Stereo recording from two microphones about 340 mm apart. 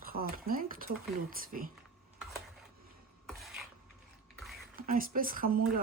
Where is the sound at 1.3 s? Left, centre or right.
Right.